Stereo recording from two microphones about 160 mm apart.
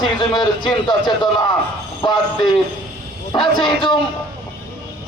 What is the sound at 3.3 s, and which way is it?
Speech, 30° left (ahead or behind).